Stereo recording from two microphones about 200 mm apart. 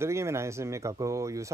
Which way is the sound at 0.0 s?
15° right (ahead or behind).